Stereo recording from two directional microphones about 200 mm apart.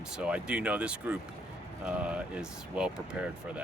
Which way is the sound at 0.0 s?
5° right (ahead or behind).